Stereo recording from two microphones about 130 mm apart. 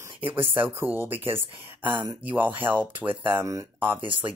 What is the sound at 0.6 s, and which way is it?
Speech, 15° right (ahead or behind).